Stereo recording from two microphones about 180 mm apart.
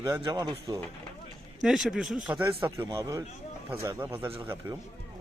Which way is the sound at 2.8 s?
20° right (ahead or behind).